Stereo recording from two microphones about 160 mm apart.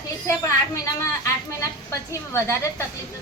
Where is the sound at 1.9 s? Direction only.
15° left (ahead or behind).